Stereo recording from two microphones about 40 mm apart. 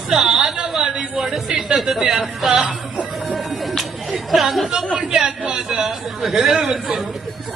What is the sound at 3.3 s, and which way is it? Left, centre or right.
Music, centre.